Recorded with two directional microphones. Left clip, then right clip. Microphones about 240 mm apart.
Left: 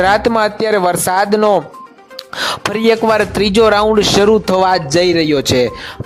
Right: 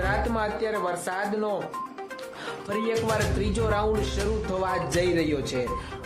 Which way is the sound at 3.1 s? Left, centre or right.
Left.